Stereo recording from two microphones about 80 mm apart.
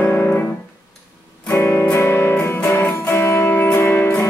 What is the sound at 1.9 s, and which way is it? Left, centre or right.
Music, left.